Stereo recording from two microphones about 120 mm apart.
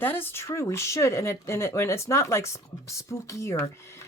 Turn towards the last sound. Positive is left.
turn(degrees=25)  # may be behind; listen again after turning